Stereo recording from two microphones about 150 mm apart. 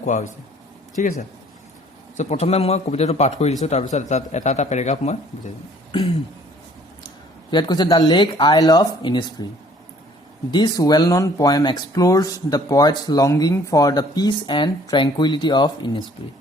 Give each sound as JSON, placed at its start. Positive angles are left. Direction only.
{"t": 0.0, "sound": "speech", "side_deg": 55}
{"t": 2.1, "sound": "a man's voice", "side_deg": 45}
{"t": 5.9, "sound": "throat clearing", "side_deg": 35}
{"t": 7.5, "sound": "speech", "side_deg": 25}
{"t": 10.5, "sound": "speech", "side_deg": 30}